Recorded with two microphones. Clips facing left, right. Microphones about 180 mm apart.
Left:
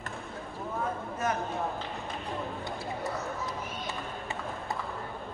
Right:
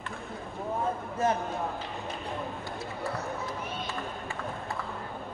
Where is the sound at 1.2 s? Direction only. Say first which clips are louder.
Right 4 dB; 30° right (ahead or behind).